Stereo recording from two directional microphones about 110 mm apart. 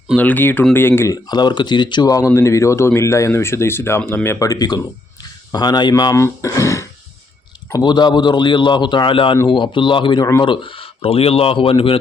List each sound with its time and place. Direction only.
0.2 s speech: 15° left (ahead or behind)
1.1 s speech: 40° left (ahead or behind)
7.7 s a man's voice: 40° left (ahead or behind); by 11.9 s 55° left (ahead or behind)